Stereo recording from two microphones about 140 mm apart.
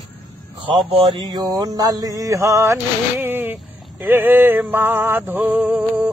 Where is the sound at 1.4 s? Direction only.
25° right (ahead or behind).